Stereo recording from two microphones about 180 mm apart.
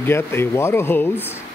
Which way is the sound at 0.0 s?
15° left (ahead or behind).